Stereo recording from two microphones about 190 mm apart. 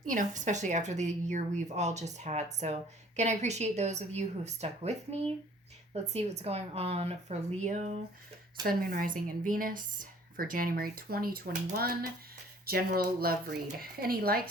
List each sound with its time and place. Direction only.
0.0 s a woman's voice: 45° right (ahead or behind)
8.6 s a woman's voice: 50° right (ahead or behind)